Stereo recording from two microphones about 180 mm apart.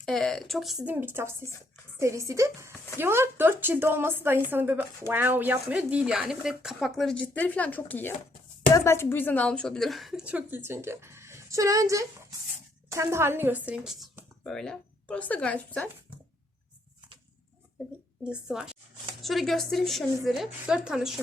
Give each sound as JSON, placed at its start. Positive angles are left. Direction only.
{"t": 0.0, "sound": "a woman's voice", "side_deg": 0}
{"t": 18.3, "sound": "speech", "side_deg": -5}